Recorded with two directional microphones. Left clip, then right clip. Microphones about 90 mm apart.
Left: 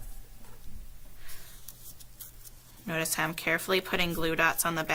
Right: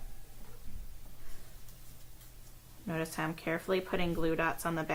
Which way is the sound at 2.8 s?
30° left (ahead or behind).